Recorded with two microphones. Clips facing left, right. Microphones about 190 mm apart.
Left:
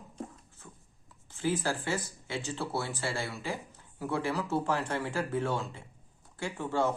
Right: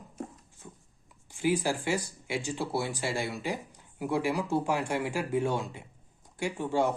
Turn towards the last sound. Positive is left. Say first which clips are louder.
# right 2 dB
turn(degrees=-15)  # may be behind; listen again after turning